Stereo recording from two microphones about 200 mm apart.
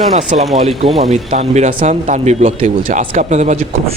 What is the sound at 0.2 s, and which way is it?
Speech, 40° right (ahead or behind).